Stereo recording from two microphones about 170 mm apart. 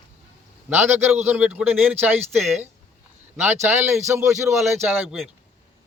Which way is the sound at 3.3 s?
15° right (ahead or behind).